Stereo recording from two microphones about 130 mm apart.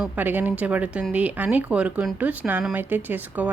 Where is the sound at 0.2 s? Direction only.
15° right (ahead or behind).